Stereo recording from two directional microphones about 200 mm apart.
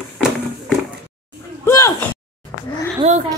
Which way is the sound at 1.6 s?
15° left (ahead or behind).